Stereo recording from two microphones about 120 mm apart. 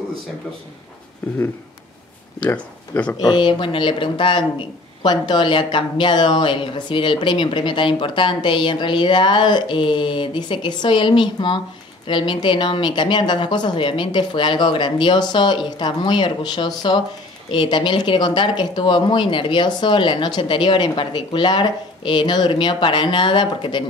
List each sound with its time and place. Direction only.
2.4 s speech: 10° left (ahead or behind)
3.1 s a woman's voice: 35° left (ahead or behind)